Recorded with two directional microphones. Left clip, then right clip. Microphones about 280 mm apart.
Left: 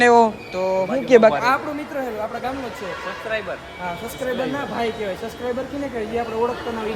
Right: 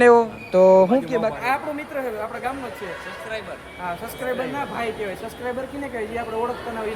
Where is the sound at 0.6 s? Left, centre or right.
Right.